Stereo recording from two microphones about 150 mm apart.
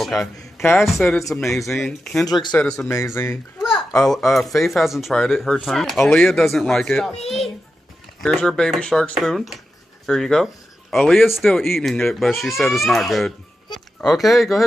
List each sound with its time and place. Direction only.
0.0 s music: centre (ahead or behind)
0.7 s a child's voice: centre (ahead or behind)
3.2 s a child's voice: 15° left (ahead or behind)
3.6 s a child's voice: centre (ahead or behind)